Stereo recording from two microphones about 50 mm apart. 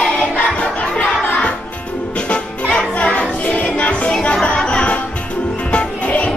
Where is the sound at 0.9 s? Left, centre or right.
Left.